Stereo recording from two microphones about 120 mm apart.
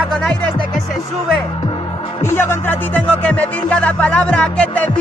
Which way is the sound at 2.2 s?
20° left (ahead or behind).